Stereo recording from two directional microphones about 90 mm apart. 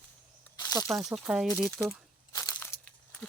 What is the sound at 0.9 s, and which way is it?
Speech, 5° right (ahead or behind).